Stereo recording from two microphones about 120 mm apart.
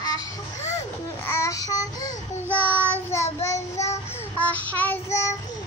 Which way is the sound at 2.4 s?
15° right (ahead or behind).